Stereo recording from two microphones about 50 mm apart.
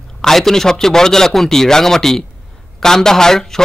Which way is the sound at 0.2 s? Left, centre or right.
Centre.